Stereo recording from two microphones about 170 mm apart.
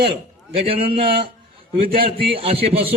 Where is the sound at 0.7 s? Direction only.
30° right (ahead or behind).